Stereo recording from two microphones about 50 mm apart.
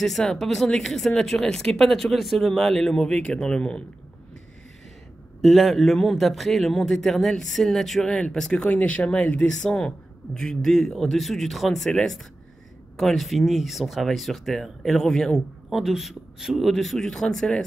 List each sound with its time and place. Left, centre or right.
0.0 s speech: centre
5.4 s speech: centre
8.5 s speech: left; by 15.8 s centre
15.8 s speech: centre